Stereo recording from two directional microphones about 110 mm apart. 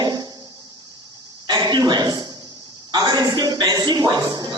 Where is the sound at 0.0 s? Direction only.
40° right (ahead or behind).